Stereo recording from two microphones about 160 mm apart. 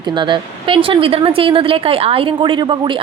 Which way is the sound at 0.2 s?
30° right (ahead or behind).